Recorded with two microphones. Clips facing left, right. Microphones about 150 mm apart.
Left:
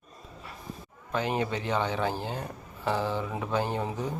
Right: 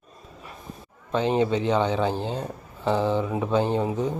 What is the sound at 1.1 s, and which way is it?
Speech, 25° right (ahead or behind).